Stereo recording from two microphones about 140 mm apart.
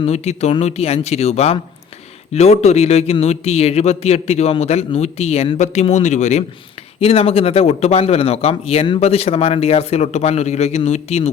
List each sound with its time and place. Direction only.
0.0 s speech: 50° left (ahead or behind)
7.0 s speech: 45° left (ahead or behind)